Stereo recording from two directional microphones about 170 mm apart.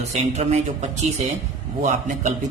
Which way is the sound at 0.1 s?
40° right (ahead or behind).